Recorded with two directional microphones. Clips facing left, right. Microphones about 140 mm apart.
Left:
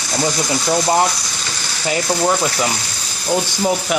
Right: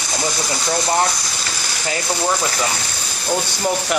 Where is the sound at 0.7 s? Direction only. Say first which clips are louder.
Left 3 dB; 20° left (ahead or behind).